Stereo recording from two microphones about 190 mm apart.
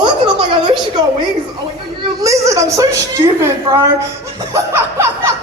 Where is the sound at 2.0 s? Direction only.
15° right (ahead or behind).